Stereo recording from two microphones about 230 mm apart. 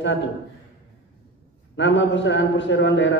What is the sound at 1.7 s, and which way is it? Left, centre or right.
Speech, left.